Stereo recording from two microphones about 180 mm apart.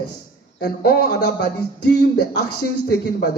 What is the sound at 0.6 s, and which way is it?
A man's voice, 60° left (ahead or behind).